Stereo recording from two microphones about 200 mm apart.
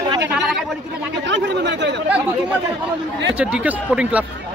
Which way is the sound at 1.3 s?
60° right (ahead or behind).